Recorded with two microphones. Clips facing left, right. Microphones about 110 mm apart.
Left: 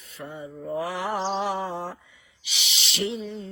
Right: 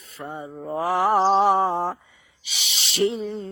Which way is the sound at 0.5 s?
45° right (ahead or behind).